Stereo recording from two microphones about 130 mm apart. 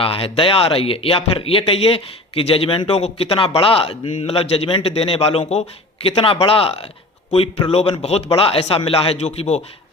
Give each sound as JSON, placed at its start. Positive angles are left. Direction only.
{"t": 0.0, "sound": "speech", "side_deg": 45}